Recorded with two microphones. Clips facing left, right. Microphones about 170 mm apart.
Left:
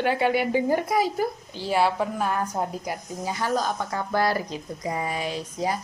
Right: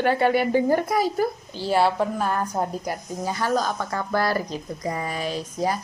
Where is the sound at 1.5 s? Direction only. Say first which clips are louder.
Right 2 dB; 35° right (ahead or behind).